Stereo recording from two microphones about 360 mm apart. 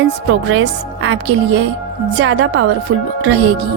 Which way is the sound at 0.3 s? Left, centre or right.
Right.